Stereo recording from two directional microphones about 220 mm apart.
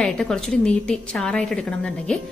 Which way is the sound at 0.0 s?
5° left (ahead or behind).